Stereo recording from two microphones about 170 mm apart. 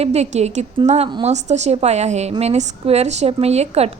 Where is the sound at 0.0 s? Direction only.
40° right (ahead or behind).